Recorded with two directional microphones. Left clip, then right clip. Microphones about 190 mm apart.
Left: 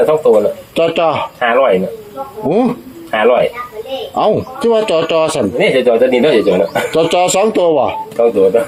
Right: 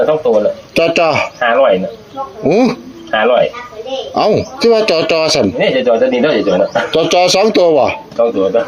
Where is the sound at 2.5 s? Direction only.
35° right (ahead or behind).